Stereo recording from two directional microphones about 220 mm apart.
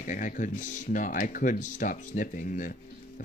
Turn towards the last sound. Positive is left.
turn(degrees=40)  # may be behind; listen again after turning